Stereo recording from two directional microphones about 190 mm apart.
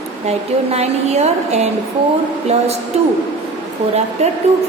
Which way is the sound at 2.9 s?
35° right (ahead or behind).